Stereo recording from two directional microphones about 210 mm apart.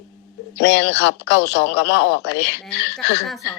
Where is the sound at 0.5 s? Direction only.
55° left (ahead or behind).